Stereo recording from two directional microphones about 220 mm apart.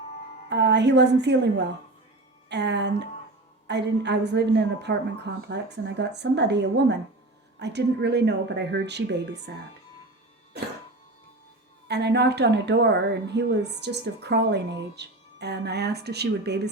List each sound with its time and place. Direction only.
0.5 s a woman's voice: 50° right (ahead or behind)
11.9 s a woman's voice: 50° right (ahead or behind)